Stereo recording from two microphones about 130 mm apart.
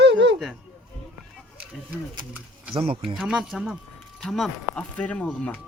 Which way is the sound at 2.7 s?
45° right (ahead or behind).